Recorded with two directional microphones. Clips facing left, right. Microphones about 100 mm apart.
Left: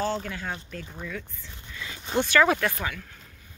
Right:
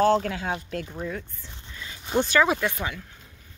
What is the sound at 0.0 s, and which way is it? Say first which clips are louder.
Speech: right 8 dB; 55° right (ahead or behind).